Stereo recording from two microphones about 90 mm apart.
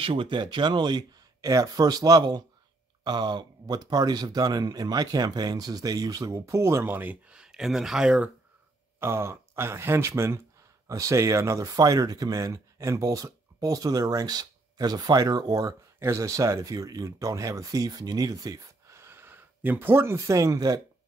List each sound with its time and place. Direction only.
0.0 s speech: 80° right; by 8.3 s 10° right (ahead or behind)
9.0 s speech: 30° right (ahead or behind)
20.2 s speech: 35° right (ahead or behind)